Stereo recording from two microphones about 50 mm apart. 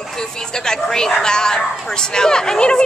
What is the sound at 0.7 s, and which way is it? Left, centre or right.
Speech, centre.